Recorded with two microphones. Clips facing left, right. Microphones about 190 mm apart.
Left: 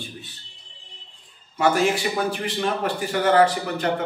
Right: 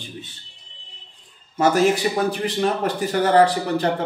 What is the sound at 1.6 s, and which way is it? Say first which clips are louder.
A man's voice: right 3 dB; 40° right (ahead or behind).